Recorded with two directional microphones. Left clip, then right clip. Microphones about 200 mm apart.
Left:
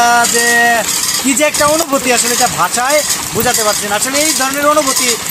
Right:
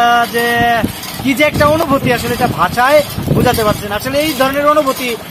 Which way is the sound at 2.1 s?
10° right (ahead or behind).